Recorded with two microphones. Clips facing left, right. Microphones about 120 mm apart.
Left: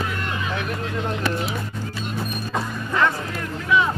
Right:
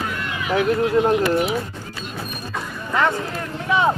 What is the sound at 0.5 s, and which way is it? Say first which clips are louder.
Speech: right 10 dB; 35° right (ahead or behind).